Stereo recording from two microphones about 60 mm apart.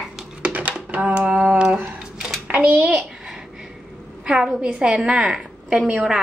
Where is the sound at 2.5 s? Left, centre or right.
Right.